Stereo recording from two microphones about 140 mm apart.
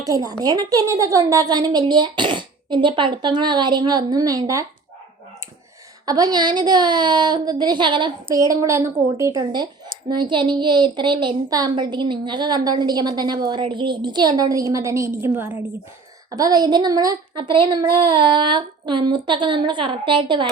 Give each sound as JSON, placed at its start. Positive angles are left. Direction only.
{"t": 0.0, "sound": "speech", "side_deg": -25}
{"t": 6.1, "sound": "speech", "side_deg": -30}
{"t": 8.3, "sound": "speech", "side_deg": -20}
{"t": 9.4, "sound": "speech", "side_deg": -30}
{"t": 16.3, "sound": "speech", "side_deg": -25}